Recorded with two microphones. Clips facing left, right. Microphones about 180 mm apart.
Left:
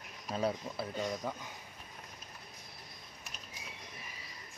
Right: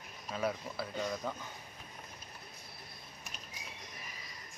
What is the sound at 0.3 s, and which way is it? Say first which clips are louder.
Speech: left 2 dB; 25° left (ahead or behind).